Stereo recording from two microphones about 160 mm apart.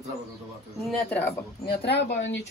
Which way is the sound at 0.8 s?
Centre (ahead or behind).